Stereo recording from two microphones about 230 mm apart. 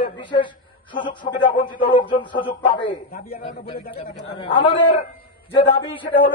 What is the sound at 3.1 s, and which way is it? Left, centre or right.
Speech, left.